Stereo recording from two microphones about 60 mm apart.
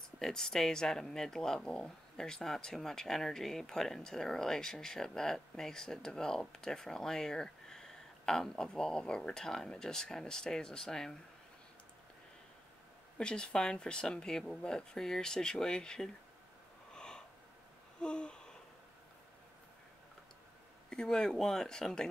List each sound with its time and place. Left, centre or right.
0.2 s speech: centre
13.2 s speech: centre
16.9 s a sound: centre
20.9 s speech: centre